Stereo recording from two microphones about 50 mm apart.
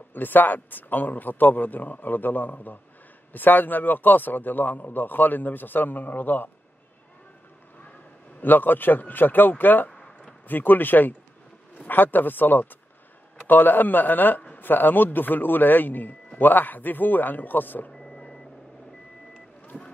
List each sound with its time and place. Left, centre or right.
0.1 s a man's voice: left
8.4 s a man's voice: left
9.8 s a sound: centre
10.5 s a man's voice: left
17.9 s reversing beeps: centre
19.7 s rowboat: centre